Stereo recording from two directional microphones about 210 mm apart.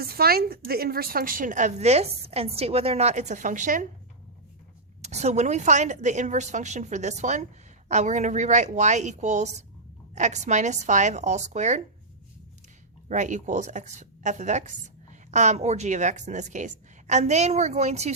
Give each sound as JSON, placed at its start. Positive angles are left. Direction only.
{"t": 0.0, "sound": "a woman's voice", "side_deg": -45}
{"t": 5.0, "sound": "a woman's voice", "side_deg": -30}
{"t": 13.1, "sound": "a woman's voice", "side_deg": -35}